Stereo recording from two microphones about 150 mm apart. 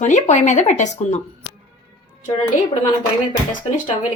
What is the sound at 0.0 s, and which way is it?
Speech, 50° left (ahead or behind).